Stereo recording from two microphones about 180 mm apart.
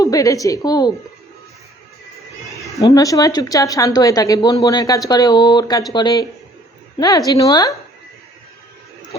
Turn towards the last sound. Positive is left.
turn(degrees=20)  # may be behind; listen again after turning